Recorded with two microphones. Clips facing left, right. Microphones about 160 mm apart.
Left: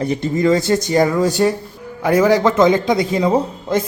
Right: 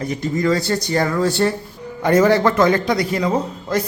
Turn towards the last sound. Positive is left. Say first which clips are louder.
# left 3 dB
turn(degrees=25)  # may be behind; listen again after turning